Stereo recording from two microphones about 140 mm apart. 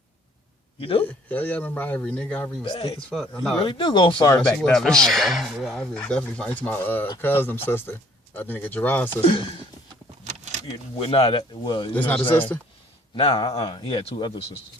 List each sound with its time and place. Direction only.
0.8 s speech: 40° left (ahead or behind)
1.0 s speech: 10° left (ahead or behind)
2.6 s speech: 40° left (ahead or behind)
3.1 s speech: centre (ahead or behind)
3.6 s speech: 35° left (ahead or behind)
4.4 s speech: 5° left (ahead or behind)
9.2 s speech: 40° left (ahead or behind)
10.2 s a sound: 60° right (ahead or behind)
11.0 s speech: 40° left (ahead or behind)
11.9 s speech: 10° left (ahead or behind)
13.1 s speech: 40° left (ahead or behind)